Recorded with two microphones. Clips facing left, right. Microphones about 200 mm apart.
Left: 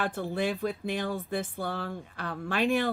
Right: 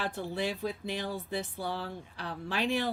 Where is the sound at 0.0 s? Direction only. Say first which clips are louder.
Left 4 dB; 50° left (ahead or behind).